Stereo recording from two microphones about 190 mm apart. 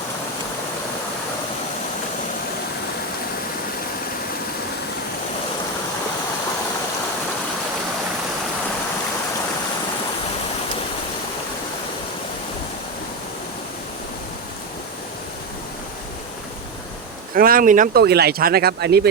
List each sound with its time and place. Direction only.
17.3 s speech: 50° right (ahead or behind)